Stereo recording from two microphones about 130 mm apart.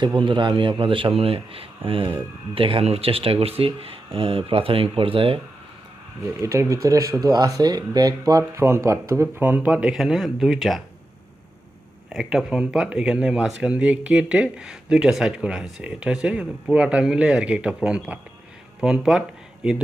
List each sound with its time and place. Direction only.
0.0 s a man's voice: 40° right (ahead or behind)
6.4 s speech: 25° right (ahead or behind)
9.9 s speech: centre (ahead or behind)
12.1 s speech: 5° right (ahead or behind)